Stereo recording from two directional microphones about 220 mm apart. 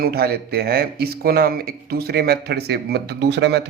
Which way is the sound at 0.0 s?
45° right (ahead or behind).